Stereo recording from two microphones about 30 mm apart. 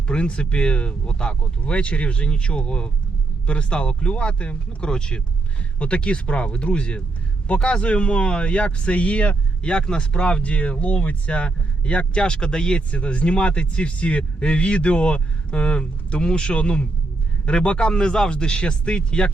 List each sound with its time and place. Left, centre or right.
0.1 s speech: left
9.6 s speech: left
12.9 s speech: left